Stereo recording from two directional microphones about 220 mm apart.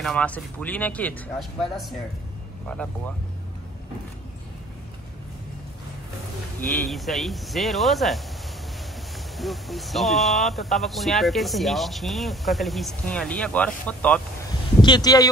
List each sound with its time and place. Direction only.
0.0 s speech: 5° left (ahead or behind)
6.6 s speech: centre (ahead or behind)
9.4 s speech: centre (ahead or behind)
14.8 s speech: 20° left (ahead or behind)